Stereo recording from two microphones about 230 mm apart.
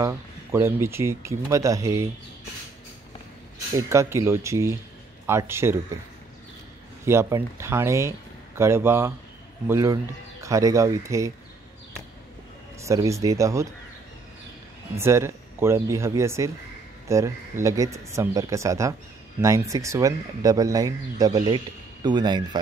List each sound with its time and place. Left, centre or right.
0.0 s speech: centre
3.7 s speech: centre
7.1 s speech: centre
12.8 s speech: centre
15.0 s speech: centre